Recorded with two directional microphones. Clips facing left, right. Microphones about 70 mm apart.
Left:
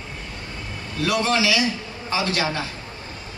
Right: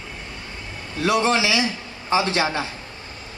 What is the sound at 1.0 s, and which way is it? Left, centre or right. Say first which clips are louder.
A woman's voice: right 2 dB; right.